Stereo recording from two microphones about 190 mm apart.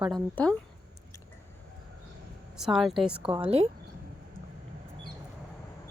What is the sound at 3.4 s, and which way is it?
Speech, 30° right (ahead or behind).